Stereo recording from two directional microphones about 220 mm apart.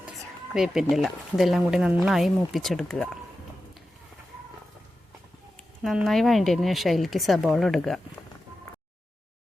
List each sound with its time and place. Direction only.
0.5 s speech: centre (ahead or behind)
5.8 s speech: centre (ahead or behind)